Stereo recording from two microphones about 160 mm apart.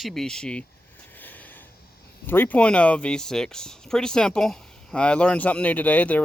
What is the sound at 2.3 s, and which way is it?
Speech, 10° left (ahead or behind).